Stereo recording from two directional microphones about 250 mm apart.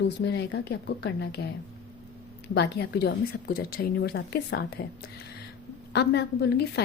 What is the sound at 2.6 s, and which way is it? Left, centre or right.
A woman's voice, left.